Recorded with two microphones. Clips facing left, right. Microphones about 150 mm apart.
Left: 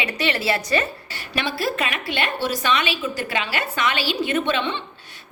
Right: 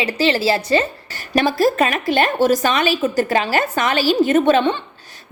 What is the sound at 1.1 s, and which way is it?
A woman's voice, 40° right (ahead or behind).